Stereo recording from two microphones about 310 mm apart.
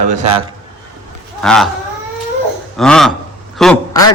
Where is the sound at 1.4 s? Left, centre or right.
Centre.